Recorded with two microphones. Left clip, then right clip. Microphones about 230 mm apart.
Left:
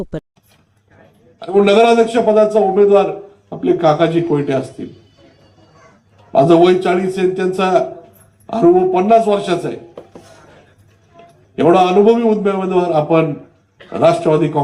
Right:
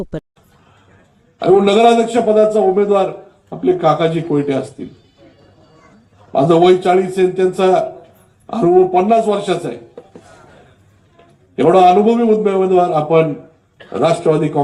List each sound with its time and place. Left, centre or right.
0.0 s speech: centre
1.4 s a man's voice: left
6.3 s a man's voice: left
11.5 s a man's voice: left